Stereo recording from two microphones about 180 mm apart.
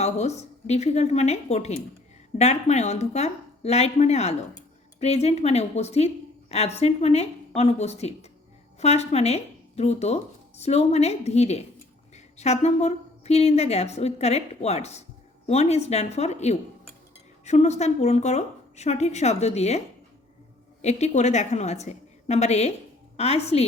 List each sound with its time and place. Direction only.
0.0 s a woman's voice: 35° left (ahead or behind)
20.8 s a woman's voice: 40° left (ahead or behind)